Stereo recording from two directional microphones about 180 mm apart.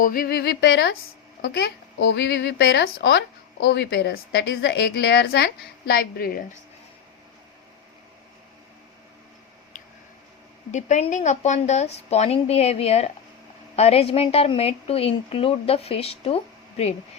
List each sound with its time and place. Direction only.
0.0 s a woman's voice: 55° left (ahead or behind)
10.7 s a woman's voice: 40° left (ahead or behind)